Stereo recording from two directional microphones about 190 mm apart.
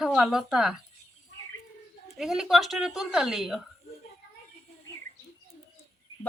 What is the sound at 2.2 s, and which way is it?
Speech, centre (ahead or behind).